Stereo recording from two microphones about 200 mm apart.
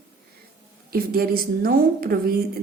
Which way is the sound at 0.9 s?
50° right (ahead or behind).